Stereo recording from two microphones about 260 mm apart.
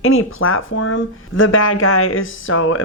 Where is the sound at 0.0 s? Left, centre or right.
Left.